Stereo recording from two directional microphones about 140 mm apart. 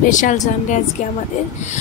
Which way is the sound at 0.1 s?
65° left (ahead or behind).